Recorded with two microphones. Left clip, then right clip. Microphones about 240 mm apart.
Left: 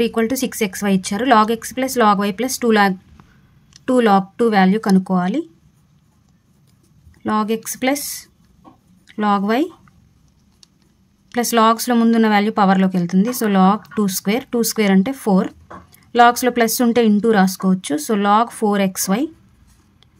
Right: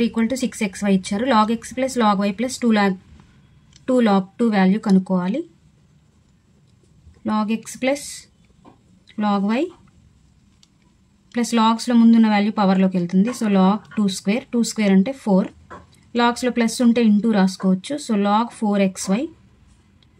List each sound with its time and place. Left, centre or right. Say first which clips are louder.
0.0 s speech: left 4 dB; left
7.2 s speech: left 4 dB; left
11.2 s speech: left 5 dB; left